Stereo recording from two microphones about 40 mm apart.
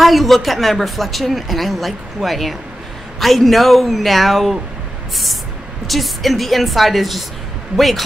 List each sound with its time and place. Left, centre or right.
0.0 s speech: centre
5.9 s speech: centre